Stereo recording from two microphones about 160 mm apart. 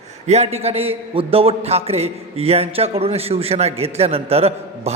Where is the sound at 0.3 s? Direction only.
40° right (ahead or behind).